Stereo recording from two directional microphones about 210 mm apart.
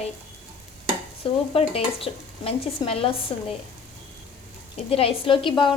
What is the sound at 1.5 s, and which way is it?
A woman's voice, 25° left (ahead or behind).